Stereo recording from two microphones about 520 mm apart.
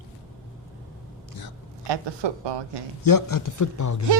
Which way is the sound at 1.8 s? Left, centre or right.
Right.